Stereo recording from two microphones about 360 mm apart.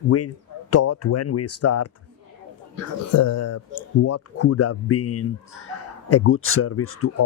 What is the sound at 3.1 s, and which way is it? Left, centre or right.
Speech, left.